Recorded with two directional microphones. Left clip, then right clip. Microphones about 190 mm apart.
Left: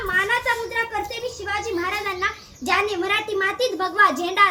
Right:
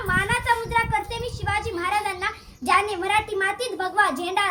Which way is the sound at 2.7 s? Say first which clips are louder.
Even; 25° right (ahead or behind).